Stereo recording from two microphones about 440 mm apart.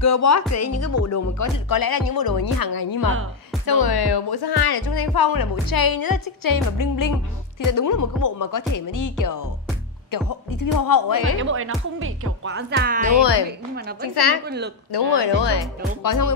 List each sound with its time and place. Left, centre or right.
0.0 s speech: left
11.4 s speech: right
13.0 s speech: left
13.5 s speech: right
14.1 s speech: left
14.4 s speech: right
14.9 s speech: left
16.0 s speech: left